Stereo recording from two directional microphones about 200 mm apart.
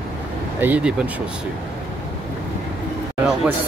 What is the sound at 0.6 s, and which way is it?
Speech, 10° right (ahead or behind).